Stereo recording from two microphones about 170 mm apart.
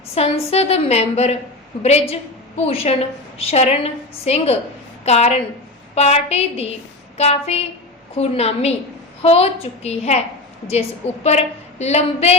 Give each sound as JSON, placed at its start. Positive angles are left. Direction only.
{"t": 0.1, "sound": "a woman's voice", "side_deg": 35}